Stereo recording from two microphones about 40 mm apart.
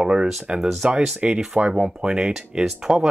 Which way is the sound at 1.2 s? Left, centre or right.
Right.